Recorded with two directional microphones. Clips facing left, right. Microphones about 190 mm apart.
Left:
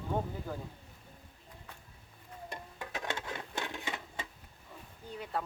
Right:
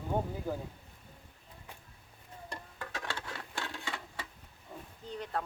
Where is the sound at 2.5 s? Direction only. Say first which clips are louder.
Even; 20° left (ahead or behind).